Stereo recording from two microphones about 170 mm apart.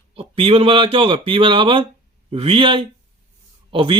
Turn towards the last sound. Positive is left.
turn(degrees=-30)  # may be behind; listen again after turning